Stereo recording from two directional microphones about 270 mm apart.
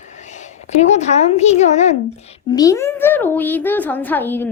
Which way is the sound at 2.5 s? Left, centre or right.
Centre.